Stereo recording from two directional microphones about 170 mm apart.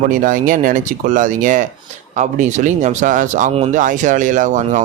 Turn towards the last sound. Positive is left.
turn(degrees=-50)  # may be behind; listen again after turning